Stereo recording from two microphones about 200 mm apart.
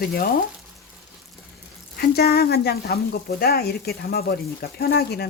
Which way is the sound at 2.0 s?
50° left (ahead or behind).